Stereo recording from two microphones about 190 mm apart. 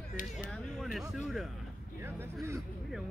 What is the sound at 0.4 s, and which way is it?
Speech, centre (ahead or behind).